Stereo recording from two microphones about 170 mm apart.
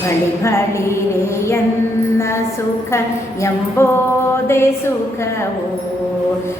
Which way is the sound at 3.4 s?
15° left (ahead or behind).